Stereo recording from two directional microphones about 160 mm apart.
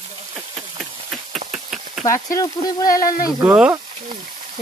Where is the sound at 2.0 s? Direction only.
20° left (ahead or behind).